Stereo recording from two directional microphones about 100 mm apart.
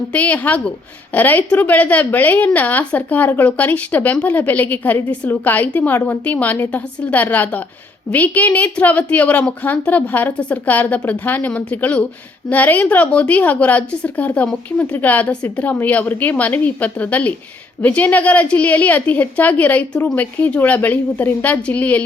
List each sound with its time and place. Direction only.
0.1 s a woman's voice: 15° left (ahead or behind)